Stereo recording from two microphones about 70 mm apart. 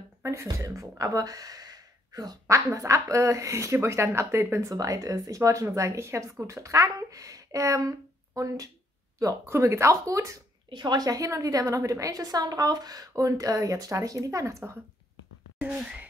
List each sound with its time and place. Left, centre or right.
0.2 s a woman's voice: right
0.7 s speech: right
2.4 s a woman's voice: right
9.5 s a woman's voice: right
10.7 s a woman's voice: right